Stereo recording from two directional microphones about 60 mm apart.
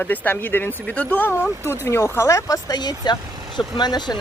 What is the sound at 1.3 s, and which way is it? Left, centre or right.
Speech, left.